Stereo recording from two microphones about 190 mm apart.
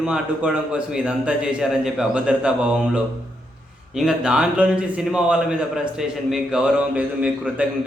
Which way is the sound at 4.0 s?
5° right (ahead or behind).